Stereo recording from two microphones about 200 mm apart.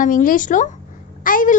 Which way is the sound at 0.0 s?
40° left (ahead or behind).